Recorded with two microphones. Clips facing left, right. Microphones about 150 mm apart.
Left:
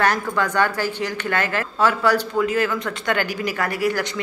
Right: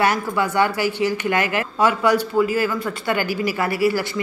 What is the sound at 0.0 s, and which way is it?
A woman's voice, 10° right (ahead or behind).